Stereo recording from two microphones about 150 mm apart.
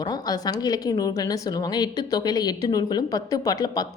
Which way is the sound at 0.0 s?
25° left (ahead or behind).